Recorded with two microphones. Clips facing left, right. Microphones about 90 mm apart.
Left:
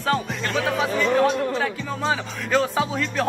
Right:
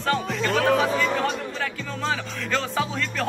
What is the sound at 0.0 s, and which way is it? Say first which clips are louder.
Music: even; 5° left (ahead or behind).